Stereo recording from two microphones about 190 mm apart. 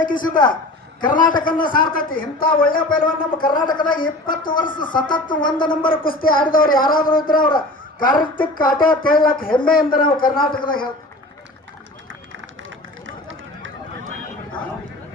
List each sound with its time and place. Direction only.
0.0 s speech: 45° left (ahead or behind)
3.7 s speech: 25° left (ahead or behind)
3.9 s speech: 45° left (ahead or behind)
4.8 s speech: 25° left (ahead or behind)
5.3 s speech: 45° left (ahead or behind)
5.5 s speech: 25° left (ahead or behind)
5.9 s speech: 50° left (ahead or behind)
13.1 s a sound: 85° right